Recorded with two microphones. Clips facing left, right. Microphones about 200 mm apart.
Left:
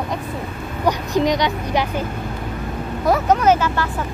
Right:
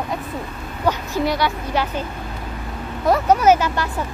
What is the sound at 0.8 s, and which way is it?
Speech, 15° left (ahead or behind).